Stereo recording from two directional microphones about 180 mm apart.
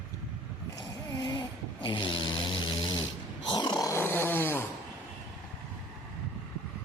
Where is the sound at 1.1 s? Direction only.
25° left (ahead or behind).